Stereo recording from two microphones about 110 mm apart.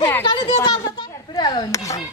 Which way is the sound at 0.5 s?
40° left (ahead or behind).